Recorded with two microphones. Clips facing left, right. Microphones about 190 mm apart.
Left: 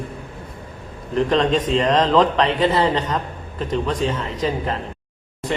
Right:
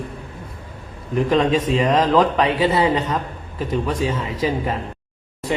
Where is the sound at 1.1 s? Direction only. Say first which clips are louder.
Right 1 dB; 5° right (ahead or behind).